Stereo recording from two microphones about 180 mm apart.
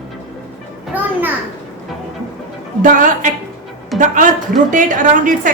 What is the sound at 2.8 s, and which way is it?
A woman's voice, 45° right (ahead or behind).